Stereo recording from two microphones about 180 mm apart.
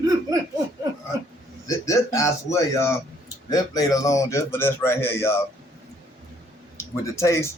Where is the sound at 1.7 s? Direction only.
15° left (ahead or behind).